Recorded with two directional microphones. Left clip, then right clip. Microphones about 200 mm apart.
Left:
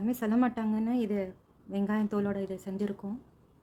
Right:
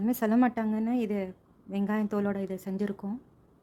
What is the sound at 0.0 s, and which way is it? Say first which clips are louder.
A woman's voice: right 3 dB; 30° right (ahead or behind).